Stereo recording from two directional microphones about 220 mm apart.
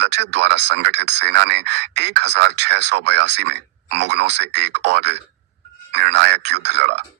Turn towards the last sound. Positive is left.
turn(degrees=-50)  # may be behind; listen again after turning